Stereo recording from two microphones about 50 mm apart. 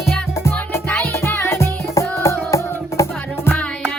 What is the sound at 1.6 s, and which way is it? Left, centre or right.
Music, left.